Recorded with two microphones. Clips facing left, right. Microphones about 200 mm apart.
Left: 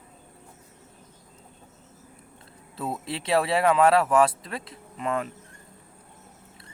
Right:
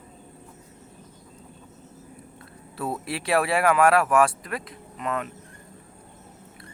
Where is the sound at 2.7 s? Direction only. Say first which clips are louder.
Right 2 dB; 20° left (ahead or behind).